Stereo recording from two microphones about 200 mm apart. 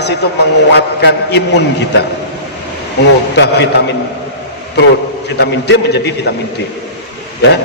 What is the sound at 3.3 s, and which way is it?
Speech, 55° left (ahead or behind).